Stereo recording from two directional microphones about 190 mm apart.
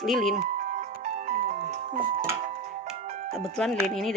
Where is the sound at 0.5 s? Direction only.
40° right (ahead or behind).